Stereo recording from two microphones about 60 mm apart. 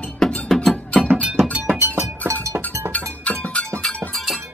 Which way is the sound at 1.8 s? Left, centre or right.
Right.